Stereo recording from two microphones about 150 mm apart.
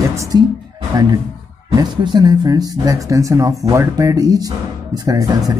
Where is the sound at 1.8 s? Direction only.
30° right (ahead or behind).